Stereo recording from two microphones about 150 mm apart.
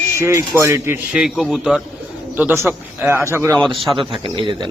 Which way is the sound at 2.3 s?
15° right (ahead or behind).